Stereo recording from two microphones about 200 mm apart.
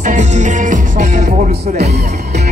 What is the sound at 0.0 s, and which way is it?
Music, 35° right (ahead or behind).